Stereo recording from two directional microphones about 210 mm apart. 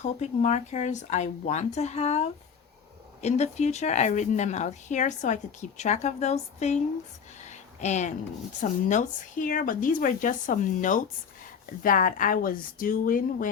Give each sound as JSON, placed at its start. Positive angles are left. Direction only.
{"t": 0.0, "sound": "speech", "side_deg": 35}
{"t": 7.8, "sound": "speech", "side_deg": 35}